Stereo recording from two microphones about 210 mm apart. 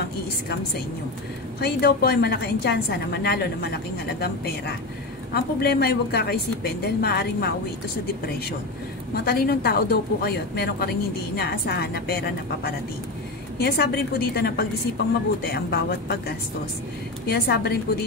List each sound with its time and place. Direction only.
1.6 s a woman's voice: 50° left (ahead or behind)
5.3 s a woman's voice: 50° left (ahead or behind)
9.1 s a woman's voice: 45° left (ahead or behind)